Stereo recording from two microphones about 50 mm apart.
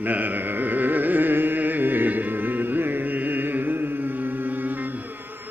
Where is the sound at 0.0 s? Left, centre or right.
Right.